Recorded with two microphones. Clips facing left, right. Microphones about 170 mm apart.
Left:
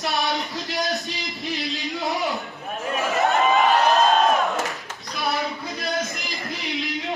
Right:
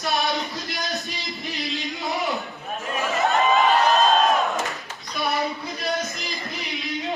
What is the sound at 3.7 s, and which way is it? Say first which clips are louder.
Crowd: left 1 dB; 20° left (ahead or behind).